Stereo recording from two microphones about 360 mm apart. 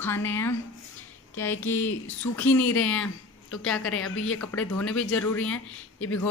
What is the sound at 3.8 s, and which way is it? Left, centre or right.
Speech, left.